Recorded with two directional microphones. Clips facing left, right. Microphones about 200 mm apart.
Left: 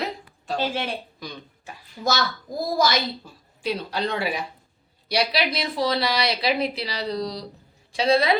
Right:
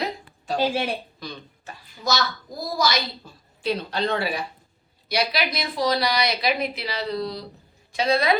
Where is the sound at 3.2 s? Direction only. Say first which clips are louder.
Right 1 dB; 10° left (ahead or behind).